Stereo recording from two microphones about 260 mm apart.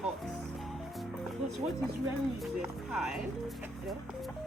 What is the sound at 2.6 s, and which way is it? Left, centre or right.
Speech, centre.